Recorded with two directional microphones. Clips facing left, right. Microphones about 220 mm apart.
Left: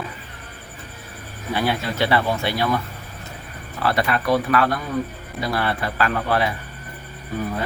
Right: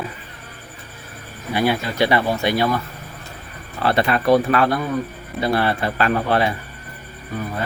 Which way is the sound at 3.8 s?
25° right (ahead or behind).